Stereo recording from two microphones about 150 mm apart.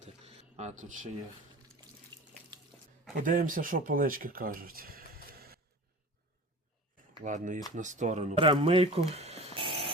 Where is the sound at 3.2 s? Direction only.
65° right (ahead or behind); by 5.5 s 85° right.